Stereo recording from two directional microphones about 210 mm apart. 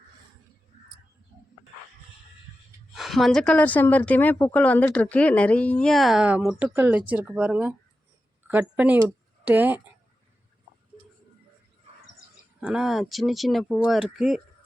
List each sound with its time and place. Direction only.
2.9 s a woman's voice: centre (ahead or behind)
11.9 s bird: 30° right (ahead or behind)
12.5 s a woman's voice: 5° right (ahead or behind)